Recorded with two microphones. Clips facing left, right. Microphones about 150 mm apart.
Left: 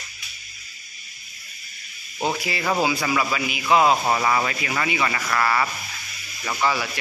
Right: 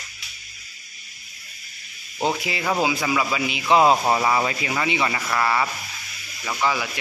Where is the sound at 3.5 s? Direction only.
25° right (ahead or behind).